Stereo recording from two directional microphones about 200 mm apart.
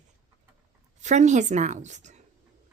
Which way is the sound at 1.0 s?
35° right (ahead or behind).